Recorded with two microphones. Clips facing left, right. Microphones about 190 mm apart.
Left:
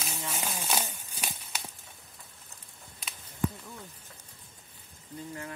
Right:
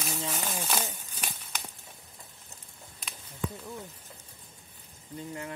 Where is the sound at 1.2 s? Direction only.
10° left (ahead or behind).